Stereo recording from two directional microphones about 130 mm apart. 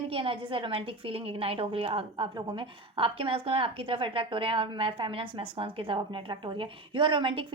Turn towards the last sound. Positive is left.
turn(degrees=-40)  # may be behind; listen again after turning